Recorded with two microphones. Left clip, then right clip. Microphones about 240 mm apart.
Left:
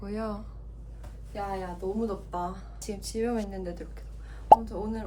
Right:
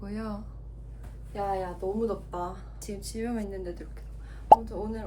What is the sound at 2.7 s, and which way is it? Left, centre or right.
A woman's voice, centre.